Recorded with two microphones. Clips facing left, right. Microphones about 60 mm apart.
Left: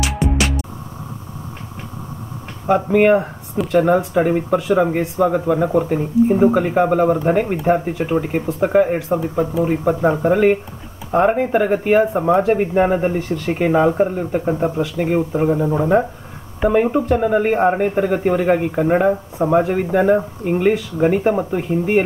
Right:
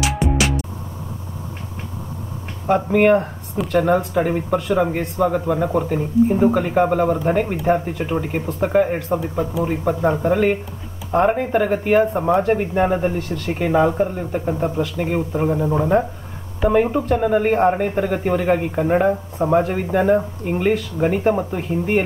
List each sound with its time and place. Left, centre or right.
0.0 s music: centre
2.6 s speech: centre
13.3 s speech: left; by 22.0 s centre